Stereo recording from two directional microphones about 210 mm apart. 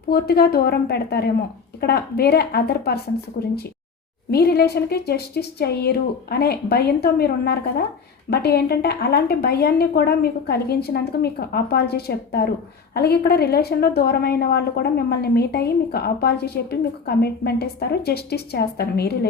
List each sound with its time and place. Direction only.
0.1 s a woman's voice: 50° left (ahead or behind)
4.3 s a woman's voice: 50° left (ahead or behind)